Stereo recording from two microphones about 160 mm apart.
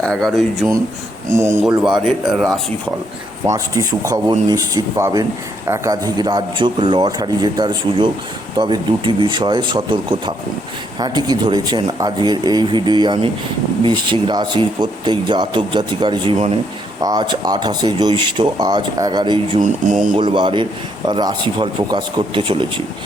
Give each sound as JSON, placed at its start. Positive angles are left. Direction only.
{"t": 0.0, "sound": "speech", "side_deg": 0}
{"t": 1.8, "sound": "speech", "side_deg": -5}
{"t": 3.4, "sound": "speech", "side_deg": -20}
{"t": 19.6, "sound": "speech", "side_deg": -50}
{"t": 20.1, "sound": "speech", "side_deg": -30}